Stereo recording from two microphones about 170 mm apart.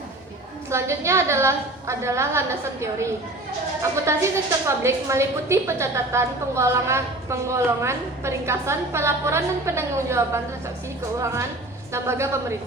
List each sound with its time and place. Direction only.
0.7 s a woman's voice: 15° right (ahead or behind)
4.1 s a woman's voice: 15° right (ahead or behind)